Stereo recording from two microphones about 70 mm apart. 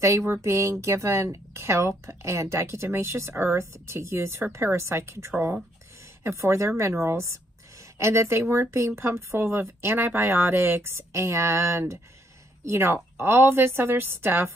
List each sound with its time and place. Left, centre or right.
0.0 s speech: right